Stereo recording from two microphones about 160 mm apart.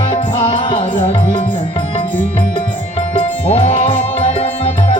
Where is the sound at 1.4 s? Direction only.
35° left (ahead or behind).